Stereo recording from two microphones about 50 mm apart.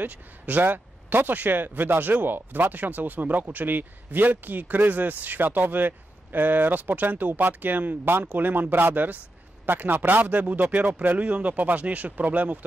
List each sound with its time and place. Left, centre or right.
0.0 s speech: right